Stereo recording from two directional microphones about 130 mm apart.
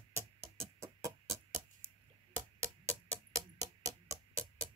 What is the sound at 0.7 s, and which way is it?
Music, 25° right (ahead or behind).